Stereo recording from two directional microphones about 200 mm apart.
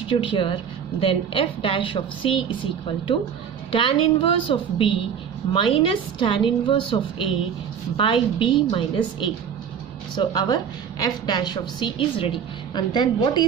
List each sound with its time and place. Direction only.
0.2 s a woman's voice: 25° left (ahead or behind)